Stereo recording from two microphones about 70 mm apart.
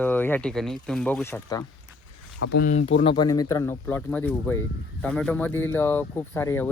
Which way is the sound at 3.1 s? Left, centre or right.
Left.